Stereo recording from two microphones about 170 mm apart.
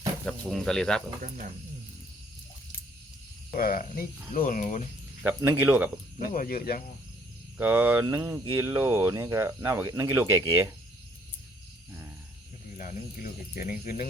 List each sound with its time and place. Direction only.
0.3 s speech: centre (ahead or behind)
3.5 s speech: 55° left (ahead or behind)
5.2 s speech: 15° right (ahead or behind)
6.1 s speech: 55° left (ahead or behind)
7.6 s speech: 10° right (ahead or behind)
12.7 s speech: 55° left (ahead or behind)